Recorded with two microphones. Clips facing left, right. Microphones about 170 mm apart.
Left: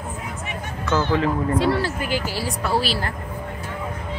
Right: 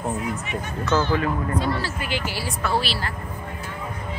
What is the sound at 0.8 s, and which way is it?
Speech, 15° left (ahead or behind).